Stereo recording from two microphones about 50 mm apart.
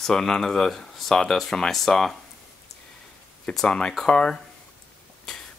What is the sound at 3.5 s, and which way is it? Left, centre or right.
Speech, centre.